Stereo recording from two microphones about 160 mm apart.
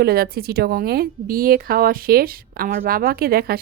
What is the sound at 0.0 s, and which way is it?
A woman's voice, 75° right (ahead or behind).